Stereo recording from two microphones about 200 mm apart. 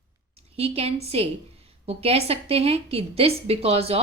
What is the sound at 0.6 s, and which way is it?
A woman's voice, 30° right (ahead or behind).